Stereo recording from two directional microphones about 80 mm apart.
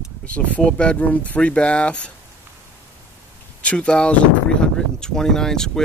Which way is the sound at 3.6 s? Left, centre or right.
Centre.